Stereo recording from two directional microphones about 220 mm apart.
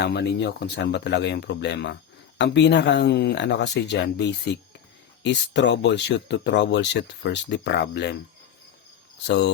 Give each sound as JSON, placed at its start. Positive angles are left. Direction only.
{"t": 0.0, "sound": "speech", "side_deg": 50}
{"t": 9.2, "sound": "speech", "side_deg": 50}